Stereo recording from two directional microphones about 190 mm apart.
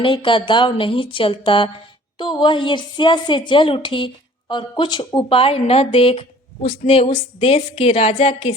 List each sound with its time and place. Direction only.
0.0 s a woman's voice: 25° left (ahead or behind)